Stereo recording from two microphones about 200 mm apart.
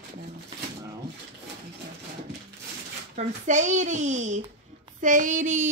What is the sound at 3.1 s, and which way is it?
Speech, 40° right (ahead or behind).